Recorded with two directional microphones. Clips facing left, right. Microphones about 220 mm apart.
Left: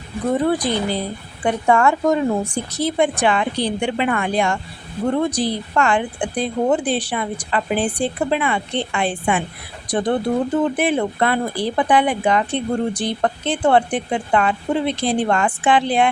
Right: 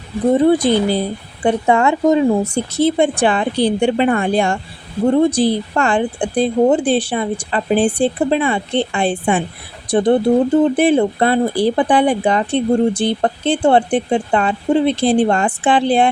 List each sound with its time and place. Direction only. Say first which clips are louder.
0.3 s speech: right 7 dB; 25° right (ahead or behind)